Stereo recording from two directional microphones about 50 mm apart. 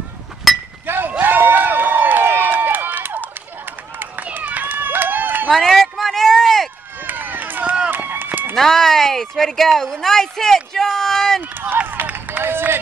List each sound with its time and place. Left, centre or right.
0.5 s chink: centre
0.8 s run: right
5.5 s a sound: centre
7.1 s run: right
8.5 s speech: centre
11.8 s run: right